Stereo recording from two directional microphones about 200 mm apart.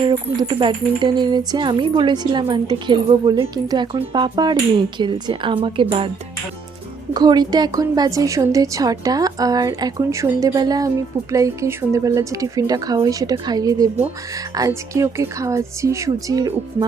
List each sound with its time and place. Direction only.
0.0 s speech: 20° right (ahead or behind)
7.1 s a woman's voice: 20° right (ahead or behind)